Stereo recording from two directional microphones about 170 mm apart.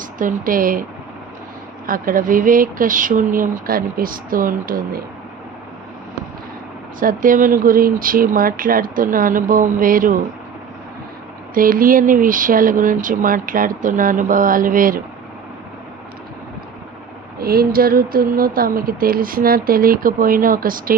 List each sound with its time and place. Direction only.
0.0 s speech: 50° right (ahead or behind)
1.9 s speech: 55° right (ahead or behind)
7.0 s speech: 55° right (ahead or behind)
11.5 s speech: 55° right (ahead or behind)
17.4 s speech: 60° right (ahead or behind)